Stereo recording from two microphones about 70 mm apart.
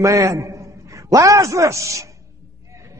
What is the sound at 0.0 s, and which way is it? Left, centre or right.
A man's voice, right.